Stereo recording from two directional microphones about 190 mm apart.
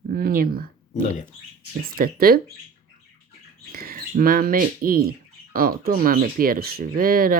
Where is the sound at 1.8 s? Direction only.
50° right (ahead or behind).